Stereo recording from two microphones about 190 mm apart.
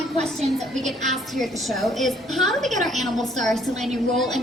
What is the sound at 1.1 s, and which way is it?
A woman's voice, centre (ahead or behind).